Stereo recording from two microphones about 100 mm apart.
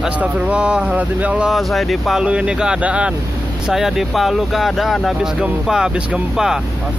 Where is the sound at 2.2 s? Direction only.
10° right (ahead or behind).